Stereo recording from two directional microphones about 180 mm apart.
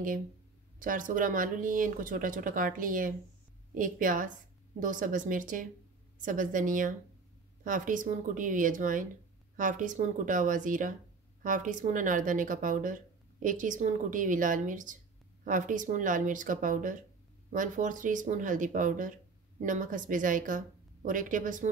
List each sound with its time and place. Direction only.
0.7 s speech: 50° right (ahead or behind)